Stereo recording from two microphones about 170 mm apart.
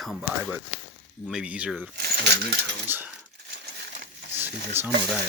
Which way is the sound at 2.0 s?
65° right (ahead or behind).